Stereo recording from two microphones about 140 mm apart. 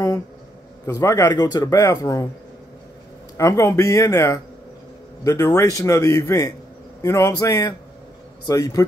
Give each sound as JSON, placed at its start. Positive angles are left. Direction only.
{"t": 0.8, "sound": "speech", "side_deg": 25}
{"t": 3.3, "sound": "speech", "side_deg": 20}